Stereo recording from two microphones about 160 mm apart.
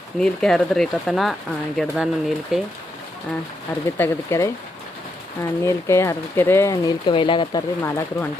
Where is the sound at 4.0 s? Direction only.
15° left (ahead or behind).